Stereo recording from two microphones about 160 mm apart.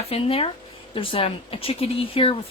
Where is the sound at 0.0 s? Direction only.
35° left (ahead or behind).